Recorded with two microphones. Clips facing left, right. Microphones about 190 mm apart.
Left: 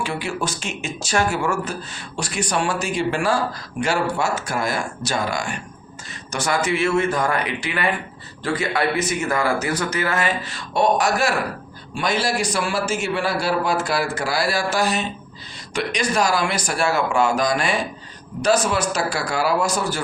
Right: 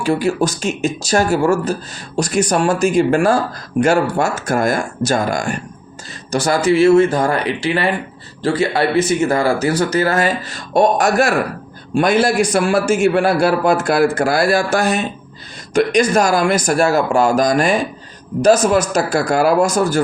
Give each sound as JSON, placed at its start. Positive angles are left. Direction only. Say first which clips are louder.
{"t": 0.0, "sound": "a man's voice", "louder": "right 9 dB", "side_deg": -40}
{"t": 6.3, "sound": "speech", "louder": "right 8 dB", "side_deg": -35}
{"t": 10.8, "sound": "a man's voice", "louder": "right 5 dB", "side_deg": -50}